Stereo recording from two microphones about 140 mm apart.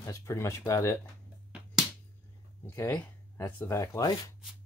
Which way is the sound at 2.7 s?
20° left (ahead or behind).